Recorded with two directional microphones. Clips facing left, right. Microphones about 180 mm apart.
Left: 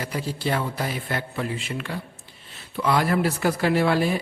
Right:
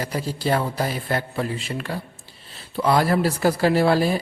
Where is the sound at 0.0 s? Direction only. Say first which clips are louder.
Right 2 dB; 40° right (ahead or behind).